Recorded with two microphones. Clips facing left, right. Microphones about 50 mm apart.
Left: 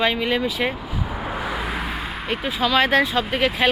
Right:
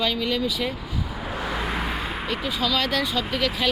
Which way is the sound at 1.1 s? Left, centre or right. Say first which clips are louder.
Left 3 dB; centre.